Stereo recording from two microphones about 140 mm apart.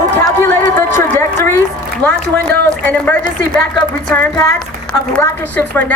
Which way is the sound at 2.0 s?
10° left (ahead or behind).